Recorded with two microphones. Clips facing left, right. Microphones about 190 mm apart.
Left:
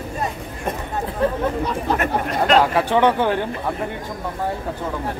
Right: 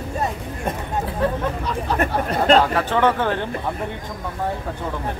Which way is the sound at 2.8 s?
15° left (ahead or behind).